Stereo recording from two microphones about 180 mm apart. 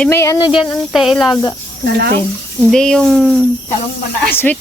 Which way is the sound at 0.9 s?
Centre (ahead or behind).